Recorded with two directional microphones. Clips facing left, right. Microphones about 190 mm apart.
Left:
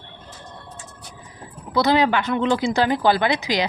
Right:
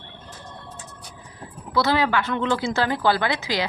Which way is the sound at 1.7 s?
20° left (ahead or behind).